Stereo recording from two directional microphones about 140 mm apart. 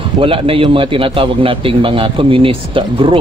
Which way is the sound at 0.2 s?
40° right (ahead or behind).